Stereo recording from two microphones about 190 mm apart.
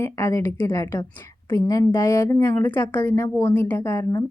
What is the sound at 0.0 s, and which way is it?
A woman's voice, 15° left (ahead or behind).